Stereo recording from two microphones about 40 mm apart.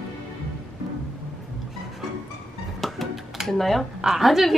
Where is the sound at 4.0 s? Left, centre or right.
Centre.